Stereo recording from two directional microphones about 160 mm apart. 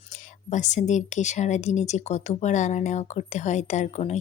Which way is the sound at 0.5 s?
50° left (ahead or behind).